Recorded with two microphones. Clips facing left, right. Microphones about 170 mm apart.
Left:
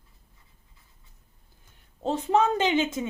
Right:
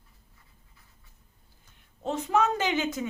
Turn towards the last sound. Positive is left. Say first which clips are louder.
# left 3 dB
turn(degrees=25)  # may be behind; listen again after turning